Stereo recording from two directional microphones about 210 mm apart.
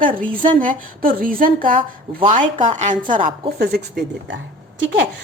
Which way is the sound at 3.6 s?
45° right (ahead or behind).